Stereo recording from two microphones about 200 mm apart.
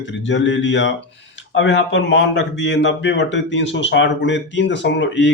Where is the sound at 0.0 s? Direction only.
65° left (ahead or behind).